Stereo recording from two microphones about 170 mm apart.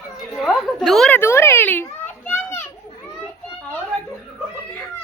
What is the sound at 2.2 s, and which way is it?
Children playing, 15° left (ahead or behind).